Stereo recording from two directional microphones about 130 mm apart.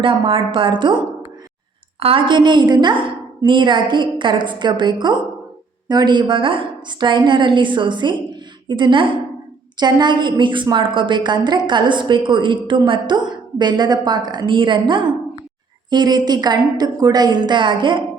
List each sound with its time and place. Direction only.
0.0 s a woman's voice: 40° right (ahead or behind)